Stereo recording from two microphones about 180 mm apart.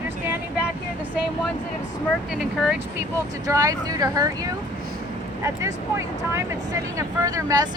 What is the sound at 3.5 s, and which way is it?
Speech, 20° right (ahead or behind).